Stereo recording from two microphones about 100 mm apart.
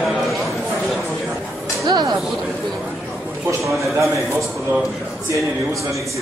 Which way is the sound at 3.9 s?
30° right (ahead or behind).